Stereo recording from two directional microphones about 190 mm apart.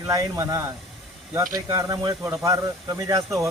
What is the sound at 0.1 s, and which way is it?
Speech, 20° right (ahead or behind).